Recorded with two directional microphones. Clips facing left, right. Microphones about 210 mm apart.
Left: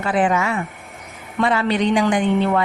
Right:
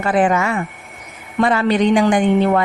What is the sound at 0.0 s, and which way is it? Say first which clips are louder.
A woman's voice: right 3 dB; 45° right (ahead or behind).